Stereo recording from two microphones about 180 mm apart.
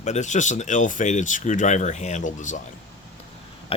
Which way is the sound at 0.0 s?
40° left (ahead or behind).